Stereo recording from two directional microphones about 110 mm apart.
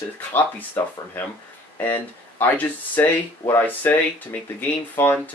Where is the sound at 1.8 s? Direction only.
15° left (ahead or behind).